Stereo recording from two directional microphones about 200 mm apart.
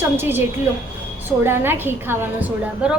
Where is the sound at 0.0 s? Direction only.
10° right (ahead or behind).